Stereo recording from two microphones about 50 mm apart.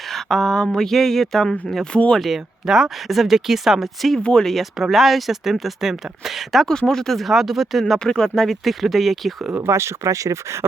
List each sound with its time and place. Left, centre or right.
0.1 s speech: centre
2.1 s speech: centre
4.2 s speech: centre
4.8 s speech: centre
6.7 s speech: centre
7.9 s speech: centre
9.6 s speech: right